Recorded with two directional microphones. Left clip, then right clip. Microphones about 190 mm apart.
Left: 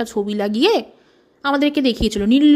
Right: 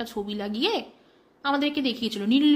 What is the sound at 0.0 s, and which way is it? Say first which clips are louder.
A woman's voice: left 10 dB; 40° left (ahead or behind).